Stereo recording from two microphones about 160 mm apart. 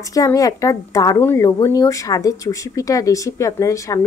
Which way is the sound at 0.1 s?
20° left (ahead or behind).